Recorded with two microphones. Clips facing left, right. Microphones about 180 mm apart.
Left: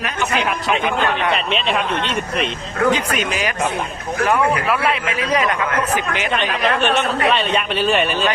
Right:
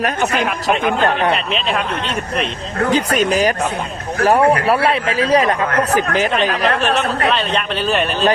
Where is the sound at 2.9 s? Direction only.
35° right (ahead or behind).